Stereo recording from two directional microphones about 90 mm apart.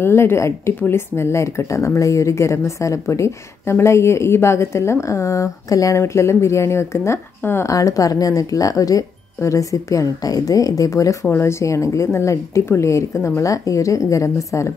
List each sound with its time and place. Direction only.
0.0 s speech: 25° left (ahead or behind)